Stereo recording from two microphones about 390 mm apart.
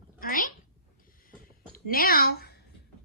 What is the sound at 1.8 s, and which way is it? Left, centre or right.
Speech, left.